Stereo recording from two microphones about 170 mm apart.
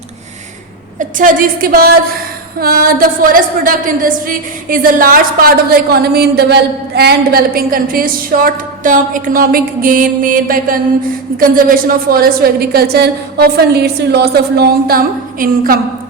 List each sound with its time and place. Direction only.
0.9 s a woman's voice: 50° right (ahead or behind)